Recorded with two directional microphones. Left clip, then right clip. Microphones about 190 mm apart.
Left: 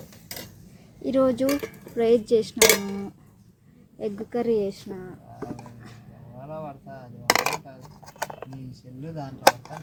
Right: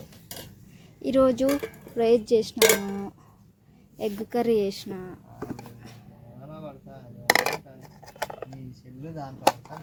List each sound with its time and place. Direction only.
1.0 s speech: 10° right (ahead or behind)
3.9 s a woman's voice: 15° right (ahead or behind)
7.3 s coin: 5° right (ahead or behind)
8.2 s a sound: 20° right (ahead or behind)